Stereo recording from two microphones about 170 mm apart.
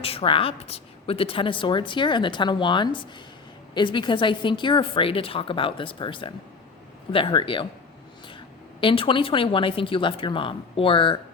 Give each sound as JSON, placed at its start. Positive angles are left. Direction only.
{"t": 0.0, "sound": "a woman's voice", "side_deg": 35}
{"t": 8.8, "sound": "a woman's voice", "side_deg": 30}